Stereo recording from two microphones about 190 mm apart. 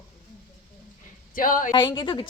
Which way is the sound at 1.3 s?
45° left (ahead or behind).